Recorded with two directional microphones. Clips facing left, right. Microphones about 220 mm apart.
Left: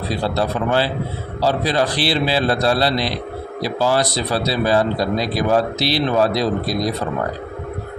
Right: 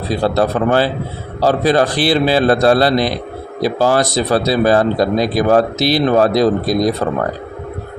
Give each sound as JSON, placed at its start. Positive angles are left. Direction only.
{"t": 0.1, "sound": "speech", "side_deg": -50}